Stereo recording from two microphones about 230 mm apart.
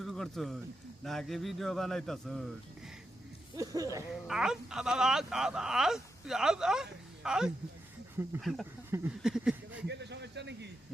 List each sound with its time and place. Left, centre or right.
0.0 s speech: centre
3.6 s speech: centre
4.1 s speech: centre
9.8 s a sound: right